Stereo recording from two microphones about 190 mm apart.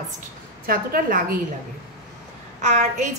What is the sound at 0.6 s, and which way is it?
Speech, 50° right (ahead or behind).